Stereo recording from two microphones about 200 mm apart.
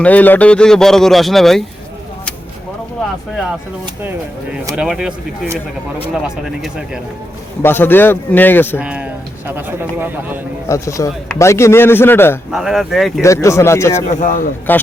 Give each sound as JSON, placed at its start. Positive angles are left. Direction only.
{"t": 0.0, "sound": "a man's voice", "side_deg": 10}
{"t": 4.7, "sound": "a man's voice", "side_deg": -5}
{"t": 7.6, "sound": "a man's voice", "side_deg": 10}
{"t": 8.8, "sound": "a man's voice", "side_deg": -5}
{"t": 10.7, "sound": "a man's voice", "side_deg": 15}
{"t": 12.5, "sound": "a man's voice", "side_deg": 0}
{"t": 13.2, "sound": "a man's voice", "side_deg": 15}
{"t": 14.1, "sound": "a man's voice", "side_deg": 40}
{"t": 14.7, "sound": "a man's voice", "side_deg": 10}